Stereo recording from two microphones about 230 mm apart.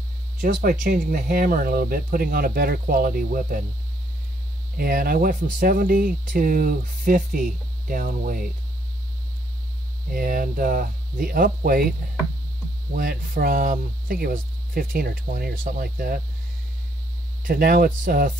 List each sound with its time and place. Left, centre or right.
0.4 s speech: right
4.7 s speech: right
10.1 s speech: right
12.9 s speech: right
17.4 s speech: right